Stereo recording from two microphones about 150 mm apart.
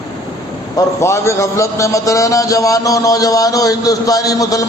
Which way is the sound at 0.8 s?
20° left (ahead or behind).